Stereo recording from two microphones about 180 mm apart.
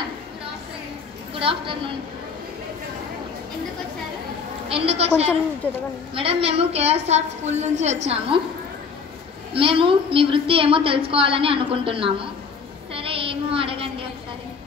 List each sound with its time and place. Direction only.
1.4 s a woman's voice: 30° right (ahead or behind)
4.6 s a woman's voice: 35° right (ahead or behind)
9.5 s a woman's voice: 30° right (ahead or behind)
12.9 s child singing: 30° right (ahead or behind)